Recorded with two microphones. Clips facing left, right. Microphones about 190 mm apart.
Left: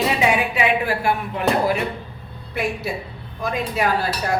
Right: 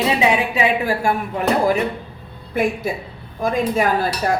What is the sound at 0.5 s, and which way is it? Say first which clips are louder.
A woman's voice: right 2 dB; 40° right (ahead or behind).